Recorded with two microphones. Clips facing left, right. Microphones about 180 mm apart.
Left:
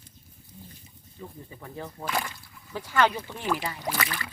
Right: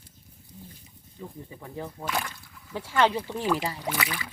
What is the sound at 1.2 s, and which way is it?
Speech, 10° right (ahead or behind).